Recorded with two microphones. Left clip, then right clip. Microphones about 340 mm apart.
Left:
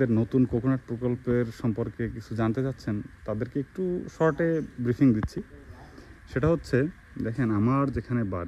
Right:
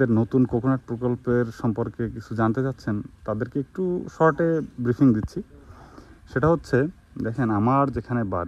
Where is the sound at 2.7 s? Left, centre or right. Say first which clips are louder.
Right 4 dB; right.